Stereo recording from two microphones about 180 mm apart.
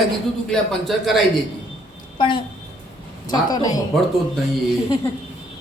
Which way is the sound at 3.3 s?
20° left (ahead or behind).